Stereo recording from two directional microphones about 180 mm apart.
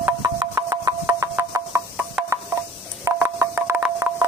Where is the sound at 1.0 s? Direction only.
15° right (ahead or behind).